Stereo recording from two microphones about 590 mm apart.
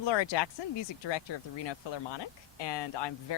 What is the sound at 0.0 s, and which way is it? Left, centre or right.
Speech, left.